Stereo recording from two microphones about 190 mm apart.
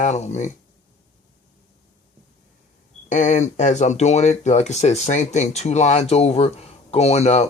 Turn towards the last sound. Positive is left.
turn(degrees=35)  # may be behind; listen again after turning